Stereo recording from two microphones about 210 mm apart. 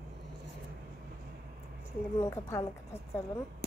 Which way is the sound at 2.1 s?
10° left (ahead or behind).